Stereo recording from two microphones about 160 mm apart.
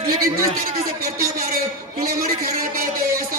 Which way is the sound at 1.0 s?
65° right (ahead or behind).